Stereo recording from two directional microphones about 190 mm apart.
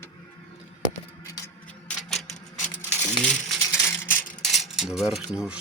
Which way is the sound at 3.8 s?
10° left (ahead or behind).